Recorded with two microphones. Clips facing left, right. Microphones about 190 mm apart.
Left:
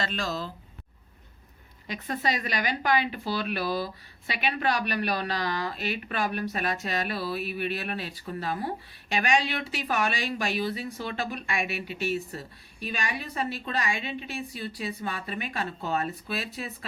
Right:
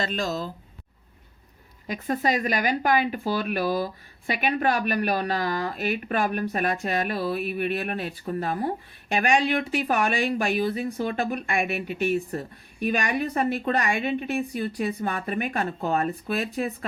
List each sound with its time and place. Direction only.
0.0 s speech: 45° right (ahead or behind)
1.9 s speech: 45° right (ahead or behind)